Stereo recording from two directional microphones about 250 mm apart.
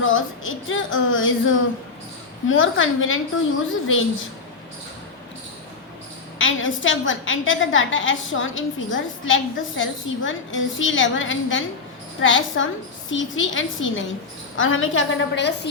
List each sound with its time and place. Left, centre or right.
0.0 s a woman's voice: left
6.4 s a woman's voice: left